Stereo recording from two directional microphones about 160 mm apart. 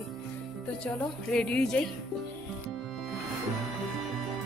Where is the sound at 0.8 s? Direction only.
5° left (ahead or behind).